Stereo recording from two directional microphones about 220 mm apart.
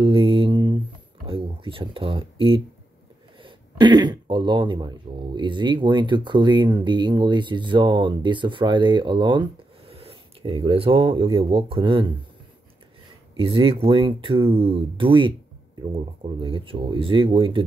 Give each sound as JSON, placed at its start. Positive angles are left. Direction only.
{"t": 0.0, "sound": "mantra", "side_deg": -25}
{"t": 1.2, "sound": "a sound", "side_deg": -25}
{"t": 3.4, "sound": "speech", "side_deg": -20}
{"t": 13.4, "sound": "speech", "side_deg": -25}